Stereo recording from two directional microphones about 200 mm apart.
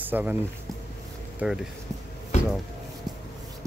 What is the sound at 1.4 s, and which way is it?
Speech, 5° right (ahead or behind).